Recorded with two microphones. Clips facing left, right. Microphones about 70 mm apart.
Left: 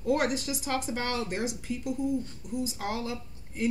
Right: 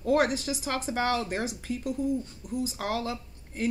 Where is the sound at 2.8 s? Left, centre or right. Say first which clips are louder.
Right 4 dB; right.